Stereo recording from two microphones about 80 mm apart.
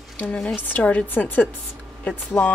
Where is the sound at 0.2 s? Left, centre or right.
Centre.